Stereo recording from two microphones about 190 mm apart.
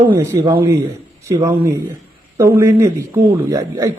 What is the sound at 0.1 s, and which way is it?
A man's voice, 15° right (ahead or behind).